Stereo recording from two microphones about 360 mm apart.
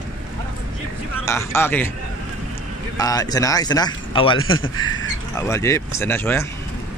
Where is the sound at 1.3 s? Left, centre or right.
Centre.